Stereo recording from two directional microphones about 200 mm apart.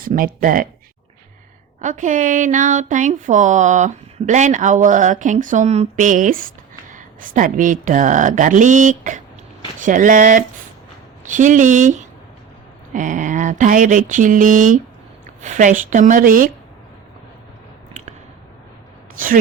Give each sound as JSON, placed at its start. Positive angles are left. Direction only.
{"t": 0.0, "sound": "speech", "side_deg": -45}
{"t": 1.8, "sound": "speech", "side_deg": -40}